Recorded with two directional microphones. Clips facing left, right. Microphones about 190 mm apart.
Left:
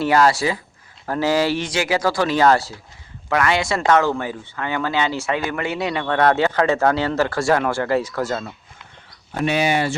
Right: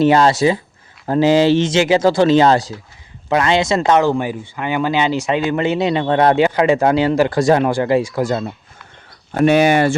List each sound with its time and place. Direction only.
0.0 s speech: 25° right (ahead or behind)
9.4 s speech: 50° right (ahead or behind)